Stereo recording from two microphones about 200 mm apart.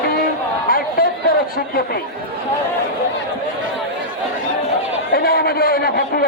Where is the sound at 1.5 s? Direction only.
50° left (ahead or behind).